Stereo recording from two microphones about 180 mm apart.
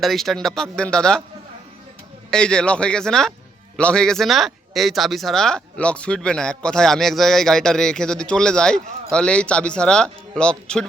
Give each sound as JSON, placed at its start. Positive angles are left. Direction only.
{"t": 0.0, "sound": "speech", "side_deg": 0}
{"t": 2.3, "sound": "speech", "side_deg": 5}